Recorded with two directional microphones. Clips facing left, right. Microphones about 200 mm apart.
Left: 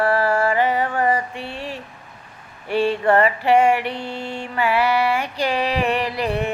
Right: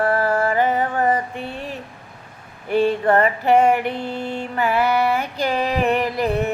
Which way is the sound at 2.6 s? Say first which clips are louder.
Right 1 dB; 45° right (ahead or behind).